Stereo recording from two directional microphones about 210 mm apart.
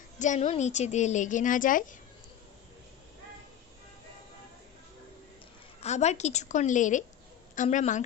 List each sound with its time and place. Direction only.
0.2 s a woman's voice: 35° left (ahead or behind)
5.8 s a woman's voice: 30° left (ahead or behind)